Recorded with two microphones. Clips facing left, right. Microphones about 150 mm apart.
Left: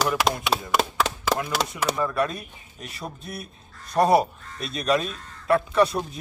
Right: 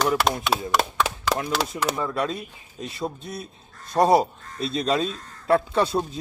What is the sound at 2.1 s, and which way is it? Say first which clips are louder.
A man's voice: left 1 dB; 25° right (ahead or behind).